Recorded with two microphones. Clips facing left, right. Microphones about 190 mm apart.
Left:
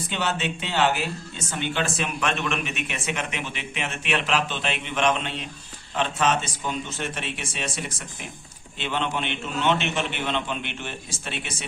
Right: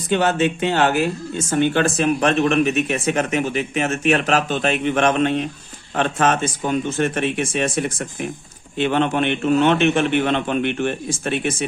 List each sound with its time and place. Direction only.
0.1 s speech: 50° right (ahead or behind)